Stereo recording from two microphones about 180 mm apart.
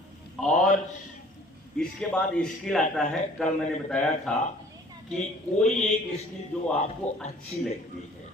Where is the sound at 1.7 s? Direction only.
5° left (ahead or behind).